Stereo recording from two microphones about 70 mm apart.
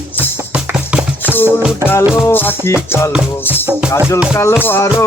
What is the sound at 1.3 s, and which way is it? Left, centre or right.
Music, left.